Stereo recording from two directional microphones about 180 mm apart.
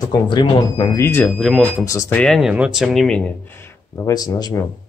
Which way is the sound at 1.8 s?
15° left (ahead or behind).